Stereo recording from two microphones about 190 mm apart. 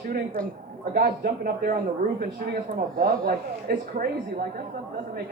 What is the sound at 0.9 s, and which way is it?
Speech, 50° right (ahead or behind).